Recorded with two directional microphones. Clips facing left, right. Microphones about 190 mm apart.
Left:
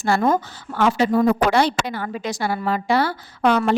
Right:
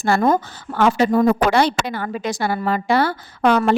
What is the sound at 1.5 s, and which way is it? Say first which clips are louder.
Speech: right 1 dB; 60° right (ahead or behind).